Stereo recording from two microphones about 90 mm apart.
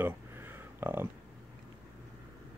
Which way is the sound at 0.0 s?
25° right (ahead or behind).